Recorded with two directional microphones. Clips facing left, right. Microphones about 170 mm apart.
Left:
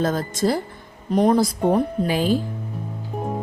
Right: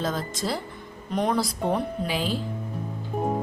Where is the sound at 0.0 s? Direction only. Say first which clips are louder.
Left 7 dB; 50° left (ahead or behind).